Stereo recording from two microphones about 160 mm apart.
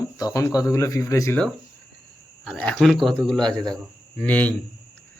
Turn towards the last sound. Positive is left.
turn(degrees=10)  # may be behind; listen again after turning